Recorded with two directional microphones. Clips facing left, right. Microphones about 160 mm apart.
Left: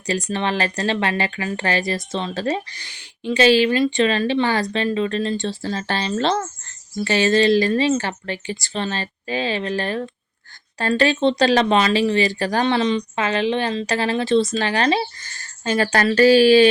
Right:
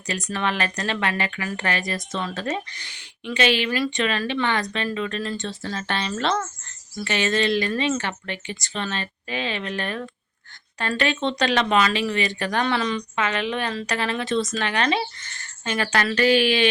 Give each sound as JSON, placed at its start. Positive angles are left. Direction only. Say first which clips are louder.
{"t": 0.1, "sound": "speech", "louder": "left 4 dB", "side_deg": 30}